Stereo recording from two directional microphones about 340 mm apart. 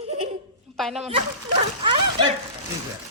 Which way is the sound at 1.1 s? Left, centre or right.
Centre.